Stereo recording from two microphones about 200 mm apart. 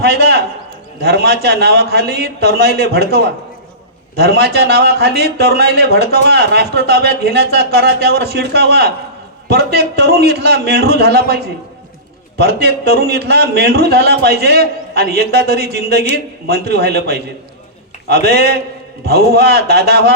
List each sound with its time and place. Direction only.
0.0 s a man's voice: 55° right (ahead or behind)
12.4 s a man's voice: 55° right (ahead or behind)